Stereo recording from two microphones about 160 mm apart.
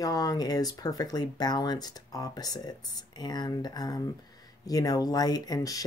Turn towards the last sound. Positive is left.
turn(degrees=20)  # may be behind; listen again after turning